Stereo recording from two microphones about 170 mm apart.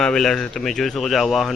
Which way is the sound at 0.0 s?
5° left (ahead or behind).